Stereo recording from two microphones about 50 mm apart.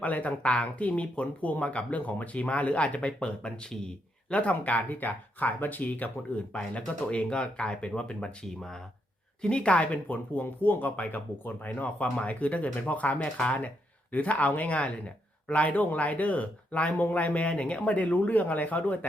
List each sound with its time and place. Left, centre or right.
0.0 s speech: left
6.5 s speech: left
9.4 s speech: left